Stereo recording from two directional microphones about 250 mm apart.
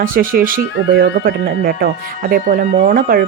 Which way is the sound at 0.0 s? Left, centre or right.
Right.